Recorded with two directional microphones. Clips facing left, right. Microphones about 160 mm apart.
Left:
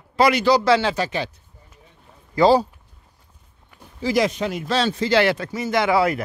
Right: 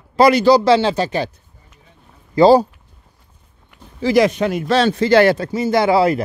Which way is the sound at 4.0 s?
65° right (ahead or behind).